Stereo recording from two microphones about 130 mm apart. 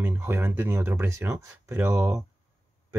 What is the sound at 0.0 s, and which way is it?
Speech, 20° right (ahead or behind).